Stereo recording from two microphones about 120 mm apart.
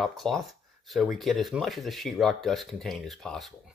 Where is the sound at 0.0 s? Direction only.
Centre (ahead or behind).